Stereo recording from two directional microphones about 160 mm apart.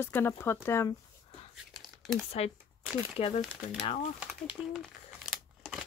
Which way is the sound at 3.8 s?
45° left (ahead or behind).